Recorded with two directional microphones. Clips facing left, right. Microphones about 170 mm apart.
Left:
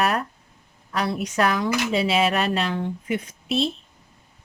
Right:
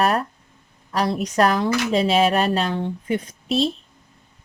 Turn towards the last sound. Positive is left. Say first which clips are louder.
# right 3 dB
turn(degrees=-35)  # may be behind; listen again after turning